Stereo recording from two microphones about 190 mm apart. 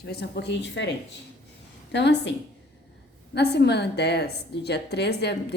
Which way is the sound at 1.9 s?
65° left (ahead or behind).